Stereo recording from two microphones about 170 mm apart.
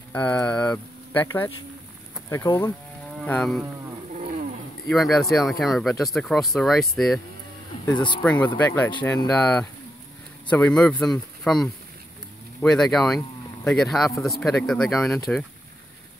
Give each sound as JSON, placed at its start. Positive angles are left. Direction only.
{"t": 0.1, "sound": "speech", "side_deg": 10}
{"t": 3.3, "sound": "speech", "side_deg": 5}
{"t": 4.1, "sound": "a sound", "side_deg": -45}
{"t": 4.8, "sound": "speech", "side_deg": 0}
{"t": 8.2, "sound": "speech", "side_deg": 5}